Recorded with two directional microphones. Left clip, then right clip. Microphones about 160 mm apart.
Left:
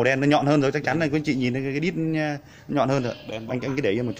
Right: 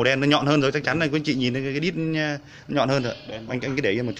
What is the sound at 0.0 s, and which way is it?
Speech, 10° left (ahead or behind).